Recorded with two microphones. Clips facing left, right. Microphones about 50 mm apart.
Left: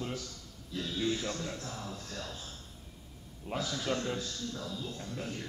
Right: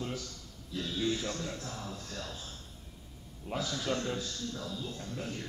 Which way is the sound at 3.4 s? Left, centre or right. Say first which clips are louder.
Even; left.